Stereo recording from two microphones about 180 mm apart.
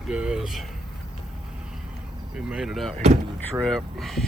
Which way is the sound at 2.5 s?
5° right (ahead or behind).